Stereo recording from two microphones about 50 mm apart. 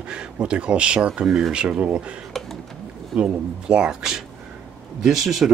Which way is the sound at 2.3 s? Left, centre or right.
Centre.